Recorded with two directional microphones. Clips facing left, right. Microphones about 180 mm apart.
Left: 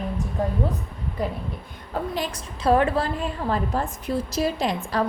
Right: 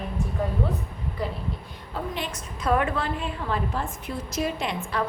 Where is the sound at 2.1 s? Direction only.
35° left (ahead or behind).